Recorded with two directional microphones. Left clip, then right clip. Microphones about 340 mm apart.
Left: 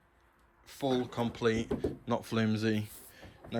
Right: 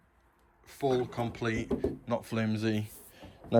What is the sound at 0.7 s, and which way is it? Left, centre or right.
Speech, centre.